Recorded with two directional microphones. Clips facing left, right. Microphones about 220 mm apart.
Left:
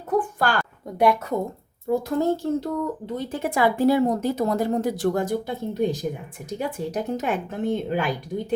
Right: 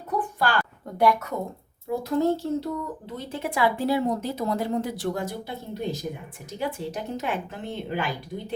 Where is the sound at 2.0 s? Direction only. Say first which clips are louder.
Right 3 dB; 50° left (ahead or behind).